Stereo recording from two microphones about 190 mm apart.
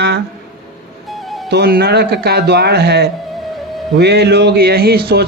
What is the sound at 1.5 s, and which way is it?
A man's voice, 55° right (ahead or behind).